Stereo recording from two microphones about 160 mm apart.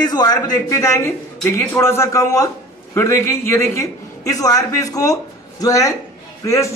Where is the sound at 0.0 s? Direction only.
25° left (ahead or behind).